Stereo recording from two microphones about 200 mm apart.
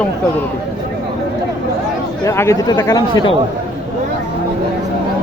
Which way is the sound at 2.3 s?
15° left (ahead or behind).